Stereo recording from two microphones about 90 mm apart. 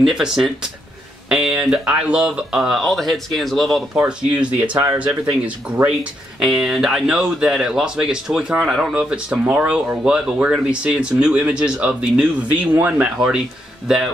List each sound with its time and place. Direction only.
0.0 s speech: 5° right (ahead or behind)
4.0 s speech: 15° right (ahead or behind)
6.4 s speech: 5° right (ahead or behind)